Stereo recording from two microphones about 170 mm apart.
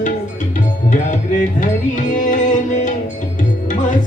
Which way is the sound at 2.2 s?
50° left (ahead or behind).